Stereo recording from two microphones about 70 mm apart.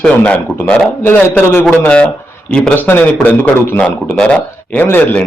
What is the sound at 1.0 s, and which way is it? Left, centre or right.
Speech, left.